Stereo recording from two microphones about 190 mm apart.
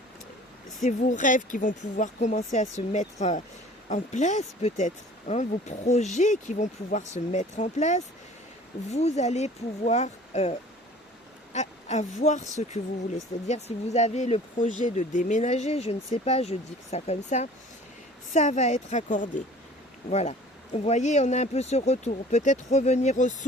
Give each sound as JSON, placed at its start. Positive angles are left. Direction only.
{"t": 0.8, "sound": "speech", "side_deg": 40}